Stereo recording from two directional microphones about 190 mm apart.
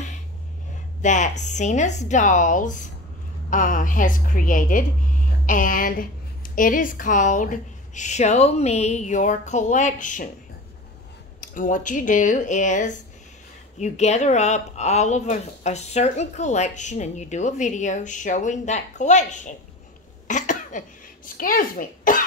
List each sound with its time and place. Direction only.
1.0 s speech: 40° left (ahead or behind)
11.4 s speech: 45° left (ahead or behind)
20.2 s cough: 40° left (ahead or behind)
21.4 s speech: 45° left (ahead or behind)